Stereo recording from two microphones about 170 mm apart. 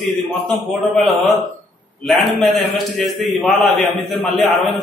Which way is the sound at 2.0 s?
Centre (ahead or behind).